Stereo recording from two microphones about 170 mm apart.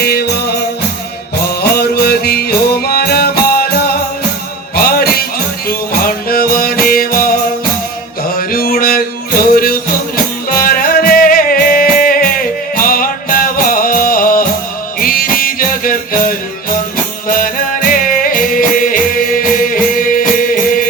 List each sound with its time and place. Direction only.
0.0 s music: 70° left (ahead or behind)
1.6 s music: 65° left (ahead or behind)
4.7 s music: 60° left (ahead or behind)